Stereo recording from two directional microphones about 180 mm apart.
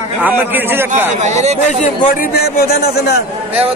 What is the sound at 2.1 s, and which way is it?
A man's voice, 60° left (ahead or behind).